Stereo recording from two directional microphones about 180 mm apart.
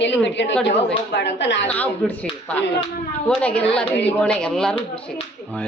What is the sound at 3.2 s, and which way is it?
A woman's voice, 5° left (ahead or behind).